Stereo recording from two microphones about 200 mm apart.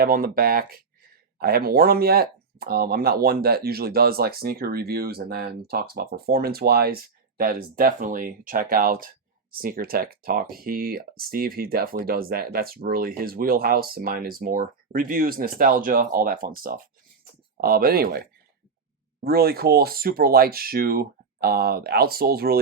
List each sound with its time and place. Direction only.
0.0 s speech: 45° right (ahead or behind)